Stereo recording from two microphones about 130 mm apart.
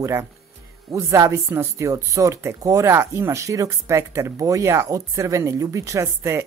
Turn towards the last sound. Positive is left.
turn(degrees=-20)  # may be behind; listen again after turning